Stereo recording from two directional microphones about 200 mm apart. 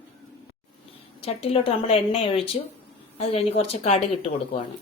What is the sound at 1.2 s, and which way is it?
A woman's voice, 30° left (ahead or behind).